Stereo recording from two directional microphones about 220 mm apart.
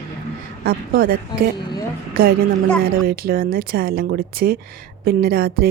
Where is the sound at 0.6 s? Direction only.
40° right (ahead or behind).